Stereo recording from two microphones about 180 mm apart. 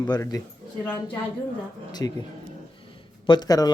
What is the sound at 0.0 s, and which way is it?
Speech, 20° left (ahead or behind).